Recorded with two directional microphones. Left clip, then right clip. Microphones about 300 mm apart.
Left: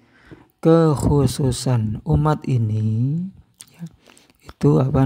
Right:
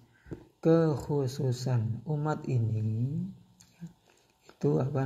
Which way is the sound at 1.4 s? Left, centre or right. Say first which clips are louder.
Left 11 dB; left.